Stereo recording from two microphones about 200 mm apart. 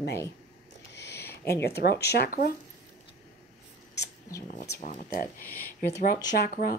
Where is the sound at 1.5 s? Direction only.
55° left (ahead or behind).